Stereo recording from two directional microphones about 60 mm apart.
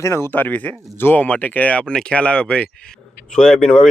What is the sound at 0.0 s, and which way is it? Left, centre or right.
Speech, left.